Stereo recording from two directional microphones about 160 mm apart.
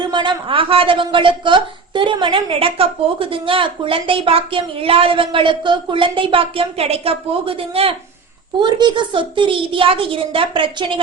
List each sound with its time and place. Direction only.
0.1 s a woman's voice: 30° right (ahead or behind)